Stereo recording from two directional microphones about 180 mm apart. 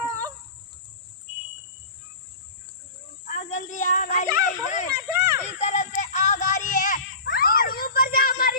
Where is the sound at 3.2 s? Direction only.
45° left (ahead or behind).